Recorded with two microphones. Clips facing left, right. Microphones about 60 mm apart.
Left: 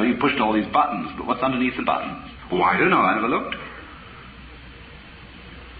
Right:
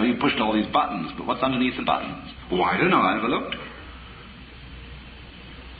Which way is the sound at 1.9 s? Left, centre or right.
Left.